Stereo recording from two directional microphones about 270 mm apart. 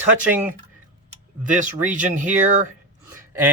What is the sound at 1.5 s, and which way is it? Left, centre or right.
Speech, right.